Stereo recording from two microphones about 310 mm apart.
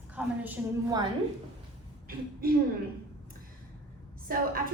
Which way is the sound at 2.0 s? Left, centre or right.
Right.